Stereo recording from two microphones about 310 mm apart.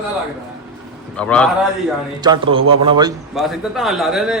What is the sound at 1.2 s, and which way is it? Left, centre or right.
Speech, centre.